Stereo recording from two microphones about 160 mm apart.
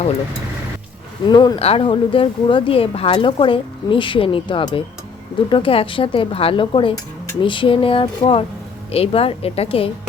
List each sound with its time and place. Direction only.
1.3 s speech: 25° left (ahead or behind)
1.5 s speech: 40° left (ahead or behind)